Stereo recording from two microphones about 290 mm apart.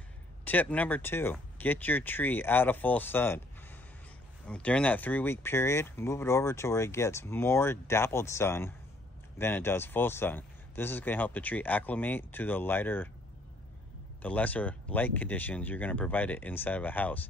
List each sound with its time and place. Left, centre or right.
0.5 s speech: centre
4.5 s speech: centre
14.2 s speech: centre